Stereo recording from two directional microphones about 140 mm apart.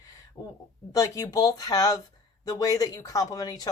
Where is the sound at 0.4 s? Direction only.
25° left (ahead or behind).